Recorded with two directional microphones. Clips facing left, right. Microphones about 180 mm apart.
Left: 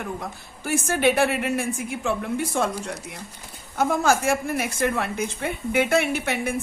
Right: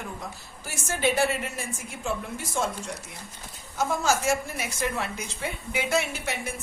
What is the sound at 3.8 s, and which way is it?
A woman's voice, 55° left (ahead or behind).